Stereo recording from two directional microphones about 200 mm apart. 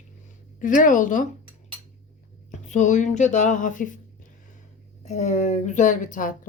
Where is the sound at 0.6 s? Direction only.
40° left (ahead or behind).